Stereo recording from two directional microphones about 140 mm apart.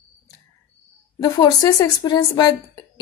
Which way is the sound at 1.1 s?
30° left (ahead or behind).